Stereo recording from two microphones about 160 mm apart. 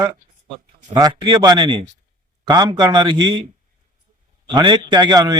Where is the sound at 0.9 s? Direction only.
25° right (ahead or behind).